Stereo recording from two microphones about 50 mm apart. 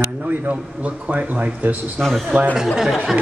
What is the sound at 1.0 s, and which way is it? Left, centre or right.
Speech, right.